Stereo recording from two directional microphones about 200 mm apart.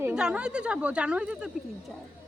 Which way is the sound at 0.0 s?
5° right (ahead or behind).